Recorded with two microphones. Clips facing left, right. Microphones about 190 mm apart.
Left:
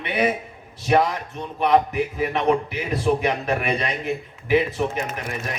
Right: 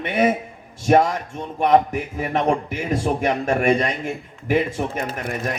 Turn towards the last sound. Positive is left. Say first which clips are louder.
# right 3 dB
turn(degrees=-50)  # may be behind; listen again after turning